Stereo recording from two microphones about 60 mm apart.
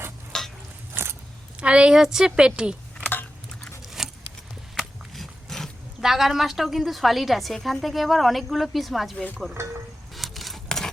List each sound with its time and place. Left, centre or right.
0.3 s stir: centre
1.5 s a woman's voice: centre
4.0 s a sound: centre
6.0 s a woman's voice: centre
9.1 s speech: left
9.6 s speech: right
10.2 s a sound: centre